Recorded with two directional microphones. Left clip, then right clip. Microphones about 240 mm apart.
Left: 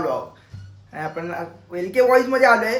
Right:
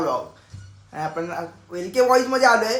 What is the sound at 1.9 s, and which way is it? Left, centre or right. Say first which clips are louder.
Speech: left 2 dB; centre.